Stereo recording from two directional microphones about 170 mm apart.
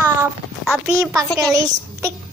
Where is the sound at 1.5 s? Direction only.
20° right (ahead or behind).